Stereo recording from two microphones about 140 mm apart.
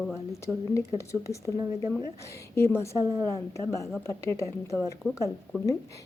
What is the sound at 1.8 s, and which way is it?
Speech, 30° right (ahead or behind).